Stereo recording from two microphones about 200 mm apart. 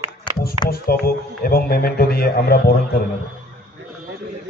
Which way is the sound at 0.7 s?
50° left (ahead or behind).